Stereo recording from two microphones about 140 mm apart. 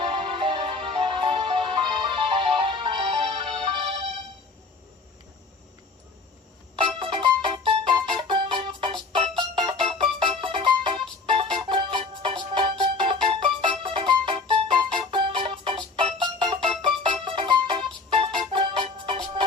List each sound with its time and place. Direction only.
0.0 s music: 40° right (ahead or behind)
6.7 s music: 40° right (ahead or behind)